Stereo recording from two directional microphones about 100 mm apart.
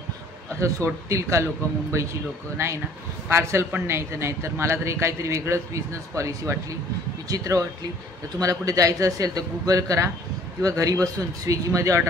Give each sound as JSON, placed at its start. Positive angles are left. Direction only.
{"t": 0.6, "sound": "a man's voice", "side_deg": -30}